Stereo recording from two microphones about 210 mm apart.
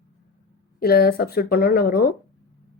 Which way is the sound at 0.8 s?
45° left (ahead or behind).